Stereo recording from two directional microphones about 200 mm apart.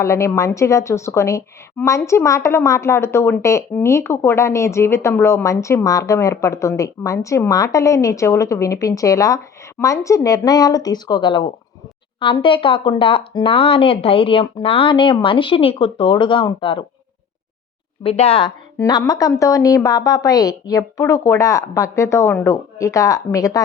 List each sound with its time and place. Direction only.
0.0 s a woman's voice: 15° left (ahead or behind)
18.0 s a woman's voice: 30° left (ahead or behind)